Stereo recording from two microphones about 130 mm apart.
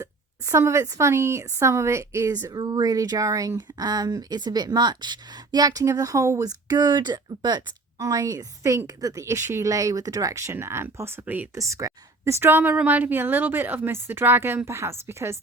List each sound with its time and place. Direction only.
0.0 s a woman's voice: 25° right (ahead or behind)